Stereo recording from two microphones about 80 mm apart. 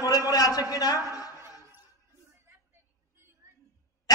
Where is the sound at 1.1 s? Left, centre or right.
Left.